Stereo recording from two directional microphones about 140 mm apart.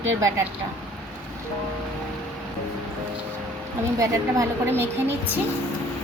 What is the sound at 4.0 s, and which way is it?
A woman's voice, 20° right (ahead or behind).